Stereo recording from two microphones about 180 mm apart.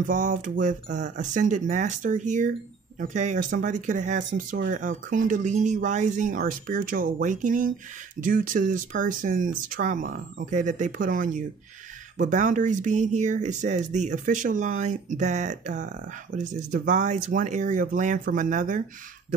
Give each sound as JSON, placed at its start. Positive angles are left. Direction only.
{"t": 0.0, "sound": "speech", "side_deg": -45}